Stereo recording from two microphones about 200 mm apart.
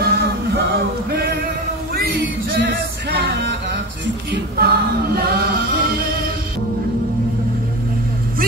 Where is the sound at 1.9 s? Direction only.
55° right (ahead or behind).